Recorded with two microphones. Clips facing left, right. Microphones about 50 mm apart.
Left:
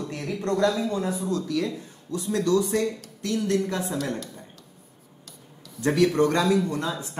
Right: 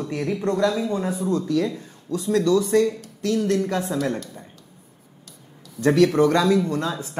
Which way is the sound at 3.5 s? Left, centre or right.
Right.